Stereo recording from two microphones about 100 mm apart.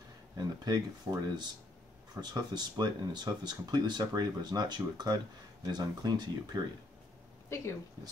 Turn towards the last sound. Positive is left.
turn(degrees=30)  # may be behind; listen again after turning